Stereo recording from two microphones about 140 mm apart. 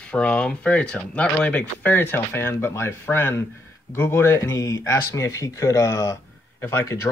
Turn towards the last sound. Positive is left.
turn(degrees=20)  # may be behind; listen again after turning